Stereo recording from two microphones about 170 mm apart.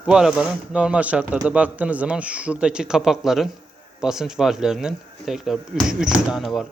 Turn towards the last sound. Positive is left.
turn(degrees=0)  # may be behind; listen again after turning